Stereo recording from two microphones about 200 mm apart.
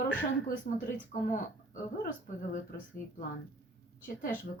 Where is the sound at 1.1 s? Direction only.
45° left (ahead or behind).